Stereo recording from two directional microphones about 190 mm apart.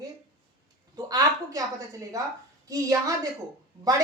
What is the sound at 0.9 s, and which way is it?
A woman's voice, 20° right (ahead or behind).